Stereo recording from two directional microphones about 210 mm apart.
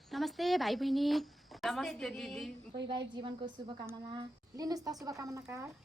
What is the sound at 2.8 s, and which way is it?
A woman's voice, 20° right (ahead or behind).